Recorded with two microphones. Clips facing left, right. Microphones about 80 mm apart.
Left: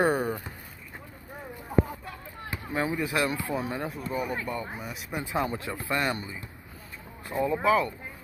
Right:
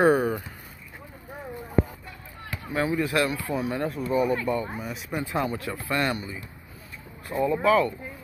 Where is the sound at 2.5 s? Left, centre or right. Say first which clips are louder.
Right 3 dB; left.